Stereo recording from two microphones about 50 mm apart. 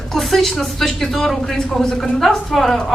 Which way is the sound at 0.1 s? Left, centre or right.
Centre.